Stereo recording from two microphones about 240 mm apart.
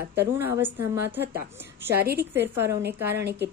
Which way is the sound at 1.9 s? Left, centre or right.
Right.